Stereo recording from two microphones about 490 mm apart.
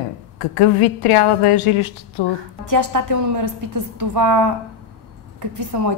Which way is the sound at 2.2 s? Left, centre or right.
Left.